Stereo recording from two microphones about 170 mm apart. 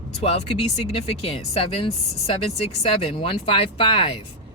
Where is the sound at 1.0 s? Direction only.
35° left (ahead or behind).